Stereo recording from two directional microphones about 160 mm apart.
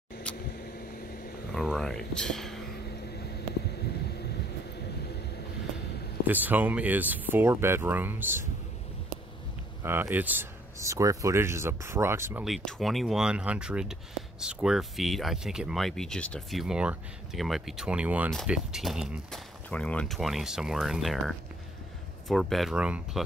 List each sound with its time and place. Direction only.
1.5 s speech: centre (ahead or behind)
6.2 s speech: 10° right (ahead or behind)
9.8 s speech: 10° right (ahead or behind)
12.4 s speech: centre (ahead or behind)
19.7 s speech: 5° left (ahead or behind)